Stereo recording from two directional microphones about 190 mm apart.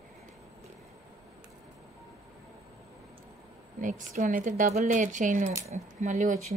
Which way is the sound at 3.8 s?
45° right (ahead or behind).